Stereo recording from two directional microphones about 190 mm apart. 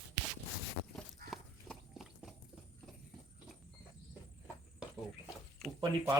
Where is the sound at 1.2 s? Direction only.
50° right (ahead or behind).